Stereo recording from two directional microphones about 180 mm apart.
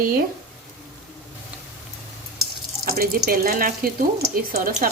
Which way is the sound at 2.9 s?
55° right (ahead or behind).